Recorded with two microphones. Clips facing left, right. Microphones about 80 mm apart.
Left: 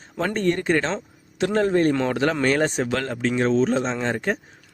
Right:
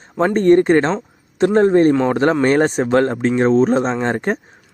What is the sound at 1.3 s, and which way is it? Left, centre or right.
Speech, right.